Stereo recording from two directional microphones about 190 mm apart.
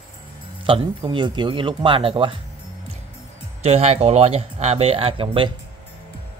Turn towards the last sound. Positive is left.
turn(degrees=-25)  # may be behind; listen again after turning